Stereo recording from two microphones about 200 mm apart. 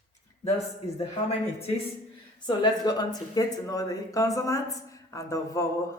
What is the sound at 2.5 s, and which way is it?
A woman's voice, 20° left (ahead or behind).